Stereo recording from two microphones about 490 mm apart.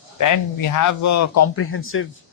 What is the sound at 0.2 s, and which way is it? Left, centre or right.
Speech, left.